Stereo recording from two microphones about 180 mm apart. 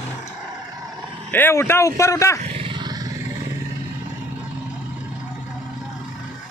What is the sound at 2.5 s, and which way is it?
Grunt, 25° right (ahead or behind).